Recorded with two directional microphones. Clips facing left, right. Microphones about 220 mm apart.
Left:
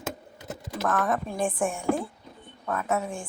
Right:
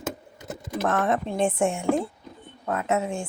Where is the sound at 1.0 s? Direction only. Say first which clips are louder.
Right 3 dB; 25° right (ahead or behind).